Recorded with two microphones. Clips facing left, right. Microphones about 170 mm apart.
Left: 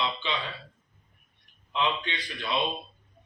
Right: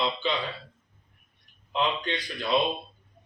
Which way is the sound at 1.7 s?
40° right (ahead or behind).